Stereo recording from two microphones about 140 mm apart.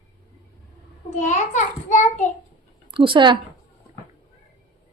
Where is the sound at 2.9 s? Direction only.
35° right (ahead or behind).